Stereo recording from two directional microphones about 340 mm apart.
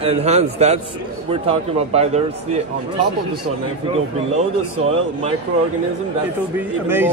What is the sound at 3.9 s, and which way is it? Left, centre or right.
A man's voice, centre.